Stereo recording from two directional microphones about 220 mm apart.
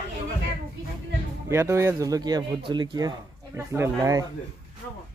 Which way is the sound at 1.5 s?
10° right (ahead or behind).